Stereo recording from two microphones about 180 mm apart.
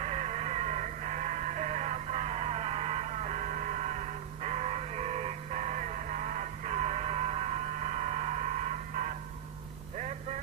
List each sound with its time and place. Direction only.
0.0 s music: 40° right (ahead or behind)